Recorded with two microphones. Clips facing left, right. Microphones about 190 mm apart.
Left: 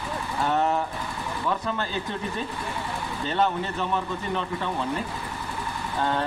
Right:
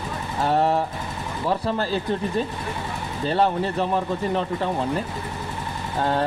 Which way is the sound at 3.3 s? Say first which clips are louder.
Right 4 dB; 35° right (ahead or behind).